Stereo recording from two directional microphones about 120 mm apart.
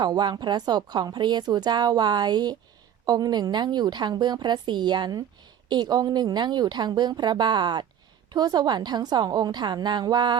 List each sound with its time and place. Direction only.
0.0 s a woman's voice: 35° right (ahead or behind)